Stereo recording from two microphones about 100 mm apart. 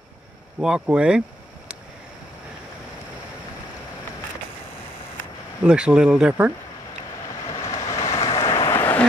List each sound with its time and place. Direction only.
0.6 s speech: 10° right (ahead or behind)
5.6 s speech: 10° right (ahead or behind)
7.5 s vehicle: 30° left (ahead or behind)
8.6 s a sound: 20° left (ahead or behind)